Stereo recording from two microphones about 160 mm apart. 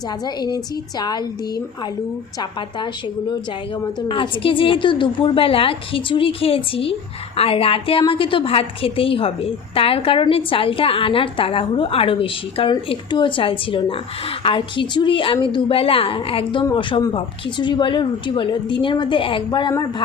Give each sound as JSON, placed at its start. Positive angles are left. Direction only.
{"t": 0.3, "sound": "a woman's voice", "side_deg": 25}